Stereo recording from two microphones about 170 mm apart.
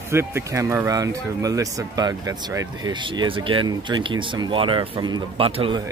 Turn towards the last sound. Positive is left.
turn(degrees=-30)  # may be behind; listen again after turning